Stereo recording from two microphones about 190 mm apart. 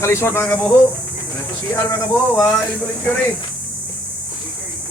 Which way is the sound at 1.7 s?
15° left (ahead or behind).